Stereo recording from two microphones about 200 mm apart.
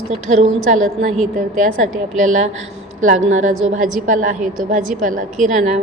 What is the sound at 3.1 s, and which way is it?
A woman's voice, 35° right (ahead or behind).